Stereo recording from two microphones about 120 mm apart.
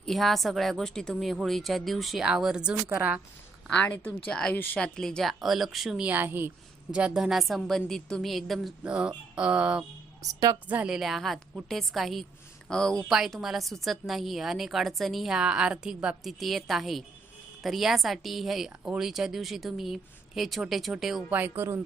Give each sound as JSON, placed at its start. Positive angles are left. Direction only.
{"t": 0.0, "sound": "a woman's voice", "side_deg": 0}
{"t": 3.7, "sound": "a woman's voice", "side_deg": 10}
{"t": 6.1, "sound": "a woman's voice", "side_deg": -15}
{"t": 10.2, "sound": "speech", "side_deg": -30}
{"t": 10.7, "sound": "a woman's voice", "side_deg": -10}
{"t": 21.3, "sound": "speech", "side_deg": -15}